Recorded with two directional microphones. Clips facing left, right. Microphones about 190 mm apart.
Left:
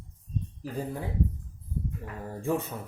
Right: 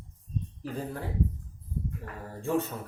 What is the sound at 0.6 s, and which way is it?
Speech, 15° left (ahead or behind).